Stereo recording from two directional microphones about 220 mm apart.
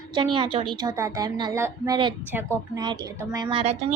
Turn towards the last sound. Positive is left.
turn(degrees=-30)  # may be behind; listen again after turning